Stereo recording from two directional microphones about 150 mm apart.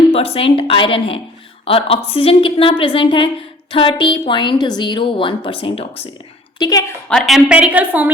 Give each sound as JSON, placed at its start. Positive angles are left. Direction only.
{"t": 0.1, "sound": "speech", "side_deg": 40}
{"t": 6.6, "sound": "a woman's voice", "side_deg": 25}
{"t": 7.1, "sound": "a woman's voice", "side_deg": 0}